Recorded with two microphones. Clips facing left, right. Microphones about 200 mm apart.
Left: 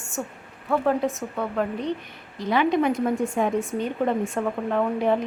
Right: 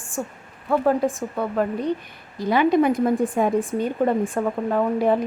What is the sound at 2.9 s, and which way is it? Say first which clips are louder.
Speech: right 3 dB; 35° right (ahead or behind).